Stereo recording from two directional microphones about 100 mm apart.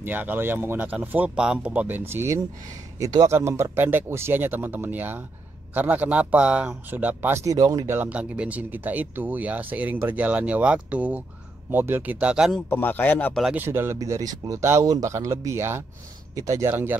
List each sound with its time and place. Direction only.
0.0 s speech: 20° right (ahead or behind)
3.0 s speech: 40° right (ahead or behind)
3.3 s speech: 25° right (ahead or behind)
7.9 s speech: 15° right (ahead or behind)
12.6 s speech: 20° left (ahead or behind)
13.6 s speech: 25° right (ahead or behind)
13.9 s speech: 35° right (ahead or behind)
14.6 s speech: 25° right (ahead or behind)